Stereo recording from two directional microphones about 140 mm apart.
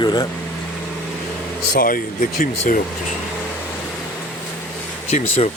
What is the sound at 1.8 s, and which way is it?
Speech, 85° left.